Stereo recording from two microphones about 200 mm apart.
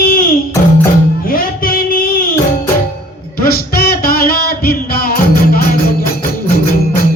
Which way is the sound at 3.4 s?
50° left (ahead or behind).